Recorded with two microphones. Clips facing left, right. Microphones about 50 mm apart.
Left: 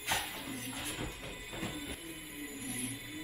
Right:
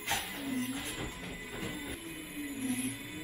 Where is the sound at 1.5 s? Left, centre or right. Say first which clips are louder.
Even; centre.